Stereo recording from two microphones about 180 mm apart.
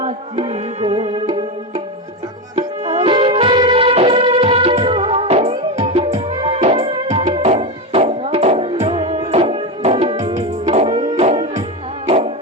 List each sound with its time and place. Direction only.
0.0 s tabla: 35° right (ahead or behind)
2.6 s music: 35° right (ahead or behind)